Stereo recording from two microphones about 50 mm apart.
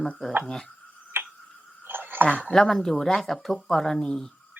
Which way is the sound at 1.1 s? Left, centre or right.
Right.